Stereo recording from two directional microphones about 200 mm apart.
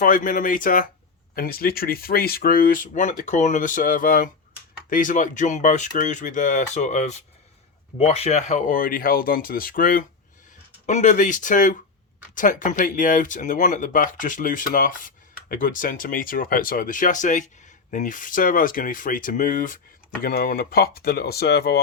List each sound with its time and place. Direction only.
0.0 s speech: 40° left (ahead or behind)